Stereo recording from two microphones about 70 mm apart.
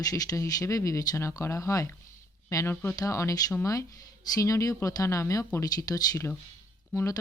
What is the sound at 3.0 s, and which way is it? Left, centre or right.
A woman's voice, left.